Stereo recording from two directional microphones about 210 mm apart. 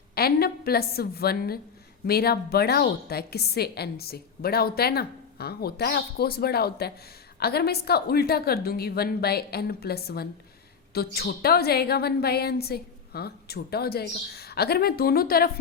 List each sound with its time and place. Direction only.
0.1 s a woman's voice: 45° left (ahead or behind)